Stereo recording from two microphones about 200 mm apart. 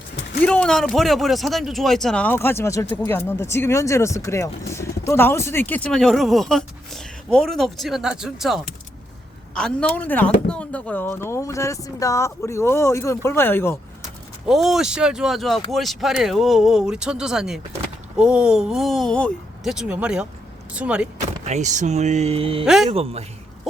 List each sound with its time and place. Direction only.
0.4 s speech: 5° left (ahead or behind)
14.4 s speech: centre (ahead or behind)
21.4 s speech: 35° right (ahead or behind)
22.6 s speech: centre (ahead or behind)
22.9 s speech: 30° right (ahead or behind)